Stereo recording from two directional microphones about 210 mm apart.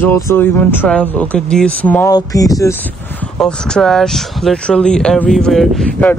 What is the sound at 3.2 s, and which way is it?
Speech, 5° left (ahead or behind).